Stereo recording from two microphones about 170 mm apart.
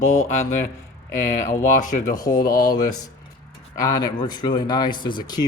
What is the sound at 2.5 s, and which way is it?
Speech, 55° left (ahead or behind).